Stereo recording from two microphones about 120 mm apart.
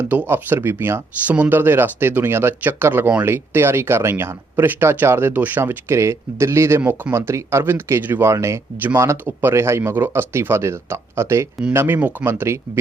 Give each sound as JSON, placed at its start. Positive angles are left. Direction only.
{"t": 0.0, "sound": "speech", "side_deg": -15}